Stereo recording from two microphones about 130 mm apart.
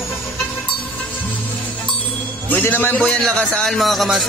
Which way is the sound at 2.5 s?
15° left (ahead or behind).